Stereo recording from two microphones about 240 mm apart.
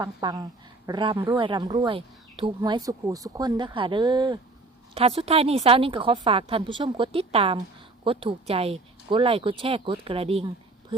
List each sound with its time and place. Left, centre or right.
0.0 s a woman's voice: centre